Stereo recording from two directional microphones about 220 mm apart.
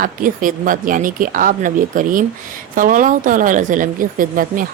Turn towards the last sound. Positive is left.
turn(degrees=-40)  # may be behind; listen again after turning